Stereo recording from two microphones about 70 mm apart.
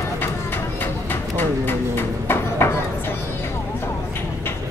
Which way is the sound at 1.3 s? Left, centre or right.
Left.